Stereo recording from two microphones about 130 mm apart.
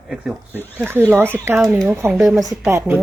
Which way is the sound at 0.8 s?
15° right (ahead or behind).